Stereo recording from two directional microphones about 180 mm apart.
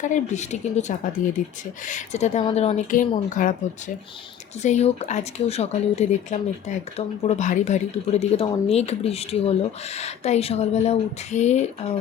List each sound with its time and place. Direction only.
0.0 s speech: 40° left (ahead or behind)
1.2 s speech: 50° left (ahead or behind)
1.9 s speech: 40° left (ahead or behind)